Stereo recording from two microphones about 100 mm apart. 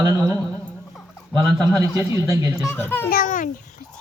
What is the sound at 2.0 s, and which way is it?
Speech, 25° right (ahead or behind).